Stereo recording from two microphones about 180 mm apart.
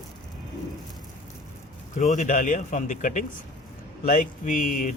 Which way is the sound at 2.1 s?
45° left (ahead or behind).